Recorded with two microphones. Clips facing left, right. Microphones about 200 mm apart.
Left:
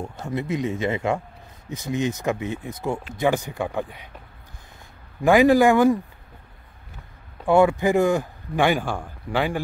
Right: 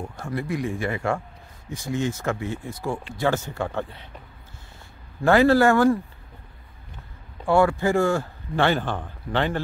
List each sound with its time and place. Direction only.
0.2 s speech: 20° left (ahead or behind)
5.2 s speech: 15° left (ahead or behind)
7.4 s speech: 20° left (ahead or behind)